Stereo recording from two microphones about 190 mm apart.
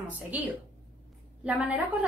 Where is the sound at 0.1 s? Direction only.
10° right (ahead or behind).